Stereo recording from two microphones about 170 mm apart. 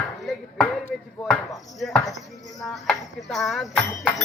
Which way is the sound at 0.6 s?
Centre (ahead or behind).